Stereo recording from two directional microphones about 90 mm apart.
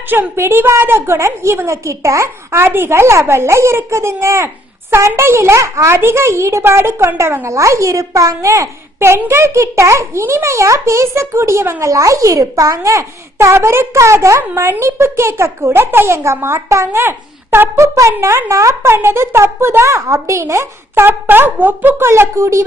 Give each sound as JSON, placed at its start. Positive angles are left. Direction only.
{"t": 0.1, "sound": "a woman's voice", "side_deg": -25}